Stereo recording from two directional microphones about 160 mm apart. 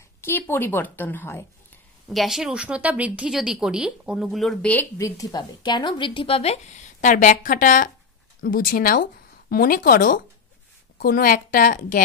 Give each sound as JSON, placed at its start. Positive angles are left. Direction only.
{"t": 0.2, "sound": "a woman's voice", "side_deg": 15}
{"t": 2.0, "sound": "a woman's voice", "side_deg": 0}
{"t": 4.9, "sound": "a woman's voice", "side_deg": 20}